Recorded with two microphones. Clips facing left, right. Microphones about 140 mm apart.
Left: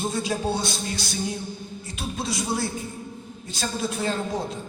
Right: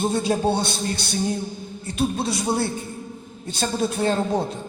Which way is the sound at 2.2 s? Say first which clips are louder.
Right 4 dB; 60° right (ahead or behind).